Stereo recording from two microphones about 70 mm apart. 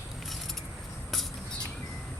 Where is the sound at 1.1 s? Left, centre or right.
Centre.